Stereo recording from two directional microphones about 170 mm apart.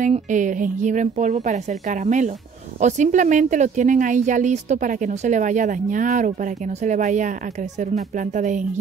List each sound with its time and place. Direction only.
0.0 s speech: 50° right (ahead or behind)